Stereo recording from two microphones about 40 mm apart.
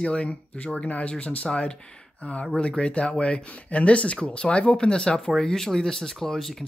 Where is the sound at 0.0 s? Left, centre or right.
Left.